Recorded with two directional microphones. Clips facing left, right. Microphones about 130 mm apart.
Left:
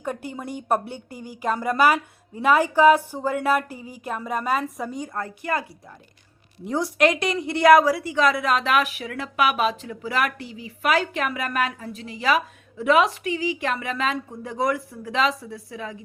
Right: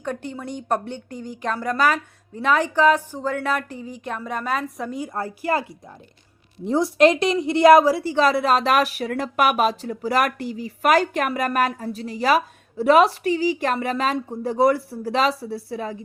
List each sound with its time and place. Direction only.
0.0 s speech: 10° left (ahead or behind)
5.1 s a woman's voice: 30° right (ahead or behind)
6.7 s a woman's voice: 25° right (ahead or behind)